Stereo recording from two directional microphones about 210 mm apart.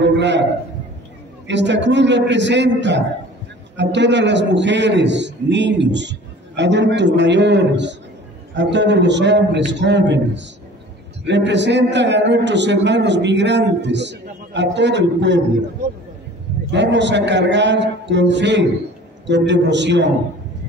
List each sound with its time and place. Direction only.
0.0 s a sound: 55° right (ahead or behind)
1.5 s a man's voice: 55° right (ahead or behind)
16.7 s a man's voice: 55° right (ahead or behind)